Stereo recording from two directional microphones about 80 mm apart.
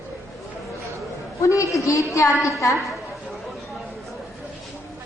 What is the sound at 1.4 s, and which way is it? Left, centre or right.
A woman's voice, left.